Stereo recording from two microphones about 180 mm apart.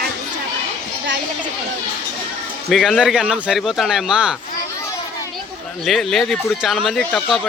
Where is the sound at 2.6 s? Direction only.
Centre (ahead or behind).